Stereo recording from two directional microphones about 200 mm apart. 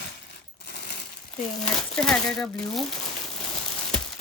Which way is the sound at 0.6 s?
55° left (ahead or behind).